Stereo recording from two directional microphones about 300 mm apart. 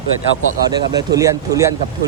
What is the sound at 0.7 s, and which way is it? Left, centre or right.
Speech, centre.